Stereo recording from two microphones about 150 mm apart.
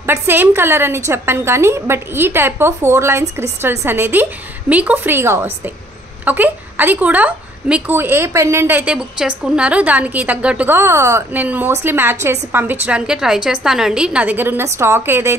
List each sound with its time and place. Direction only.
0.0 s a woman's voice: 15° right (ahead or behind)